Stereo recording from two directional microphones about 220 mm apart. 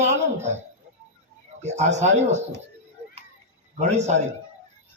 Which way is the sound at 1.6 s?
30° right (ahead or behind).